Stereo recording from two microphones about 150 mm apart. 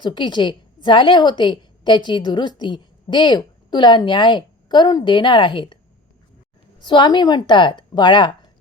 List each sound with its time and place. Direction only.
0.0 s a woman's voice: 30° left (ahead or behind)
6.8 s a woman's voice: 30° left (ahead or behind)